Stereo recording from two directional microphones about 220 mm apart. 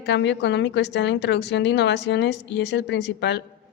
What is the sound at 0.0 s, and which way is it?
Speech, 50° left (ahead or behind).